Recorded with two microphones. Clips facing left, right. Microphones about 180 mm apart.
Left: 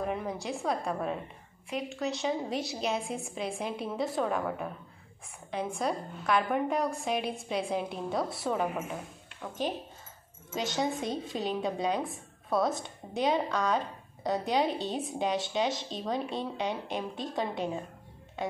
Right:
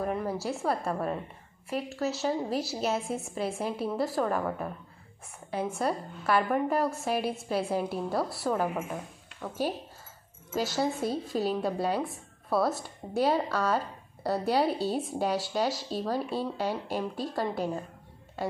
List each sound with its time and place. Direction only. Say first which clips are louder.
0.0 s speech: right 3 dB; centre (ahead or behind)
5.8 s speech: right 2 dB; 5° right (ahead or behind)